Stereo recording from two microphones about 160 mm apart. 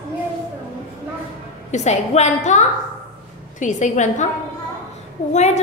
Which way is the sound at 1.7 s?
45° left (ahead or behind).